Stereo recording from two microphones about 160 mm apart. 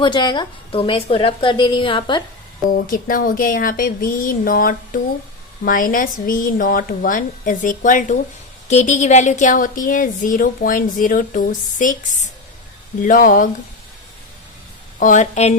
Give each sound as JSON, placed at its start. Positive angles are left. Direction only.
{"t": 0.0, "sound": "a woman's voice", "side_deg": 30}
{"t": 2.6, "sound": "speech", "side_deg": 60}
{"t": 13.0, "sound": "speech", "side_deg": 55}
{"t": 14.9, "sound": "a woman's voice", "side_deg": 55}